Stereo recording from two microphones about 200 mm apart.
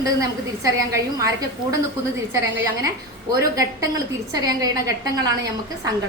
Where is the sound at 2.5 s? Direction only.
10° right (ahead or behind).